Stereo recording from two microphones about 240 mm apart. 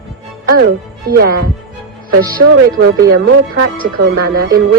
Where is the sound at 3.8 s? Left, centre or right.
Right.